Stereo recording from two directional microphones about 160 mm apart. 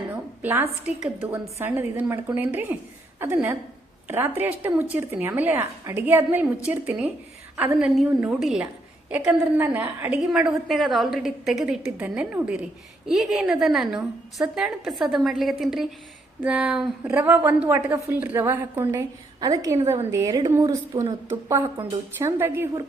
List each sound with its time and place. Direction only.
0.4 s a woman's voice: 15° right (ahead or behind)
10.1 s a woman's voice: centre (ahead or behind); by 21.1 s 20° right (ahead or behind)
22.2 s a woman's voice: 15° right (ahead or behind)